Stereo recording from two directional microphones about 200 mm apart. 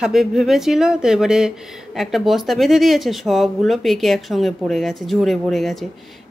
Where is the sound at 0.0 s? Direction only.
Centre (ahead or behind).